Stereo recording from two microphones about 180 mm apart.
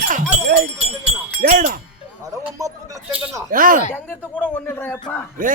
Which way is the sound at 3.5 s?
50° right (ahead or behind).